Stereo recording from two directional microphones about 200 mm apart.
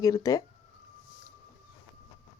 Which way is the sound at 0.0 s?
15° left (ahead or behind).